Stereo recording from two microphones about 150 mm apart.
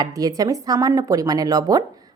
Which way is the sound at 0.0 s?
25° right (ahead or behind).